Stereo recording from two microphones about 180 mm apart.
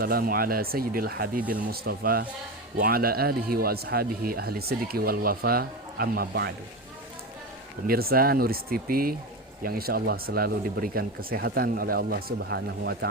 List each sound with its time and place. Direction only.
0.0 s a man's voice: 55° right (ahead or behind)
1.4 s speech: 10° right (ahead or behind)
1.7 s a man's voice: 55° right (ahead or behind)
7.9 s a man's voice: 55° right (ahead or behind)